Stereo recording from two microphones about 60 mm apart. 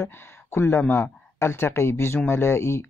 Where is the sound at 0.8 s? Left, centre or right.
Left.